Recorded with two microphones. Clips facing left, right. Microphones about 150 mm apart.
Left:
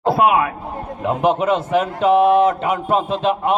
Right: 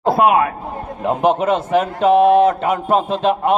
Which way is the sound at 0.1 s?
40° right (ahead or behind).